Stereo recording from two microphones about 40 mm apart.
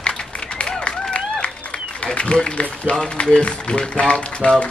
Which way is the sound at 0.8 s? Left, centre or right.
Left.